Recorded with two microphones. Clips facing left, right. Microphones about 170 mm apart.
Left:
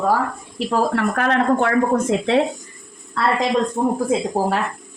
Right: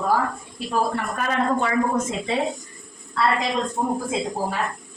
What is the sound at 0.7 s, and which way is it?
Speech, 75° left (ahead or behind).